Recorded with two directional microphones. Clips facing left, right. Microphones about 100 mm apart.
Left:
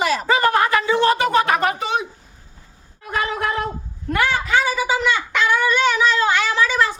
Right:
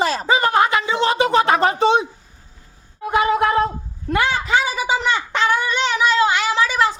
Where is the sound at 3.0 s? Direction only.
20° right (ahead or behind).